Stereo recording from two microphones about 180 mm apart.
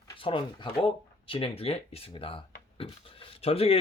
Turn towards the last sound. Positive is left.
turn(degrees=35)  # may be behind; listen again after turning